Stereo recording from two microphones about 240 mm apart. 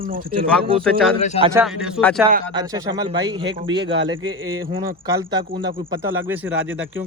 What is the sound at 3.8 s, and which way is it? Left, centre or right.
Speech, right.